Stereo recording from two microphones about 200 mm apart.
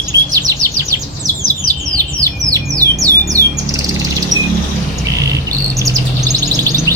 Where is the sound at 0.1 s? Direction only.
15° right (ahead or behind).